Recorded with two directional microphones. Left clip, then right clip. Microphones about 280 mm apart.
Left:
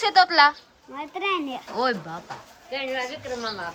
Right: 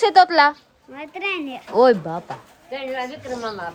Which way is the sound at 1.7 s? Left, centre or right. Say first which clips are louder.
Right 11 dB; centre.